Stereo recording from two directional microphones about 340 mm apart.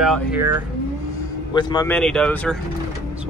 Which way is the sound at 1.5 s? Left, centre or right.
Centre.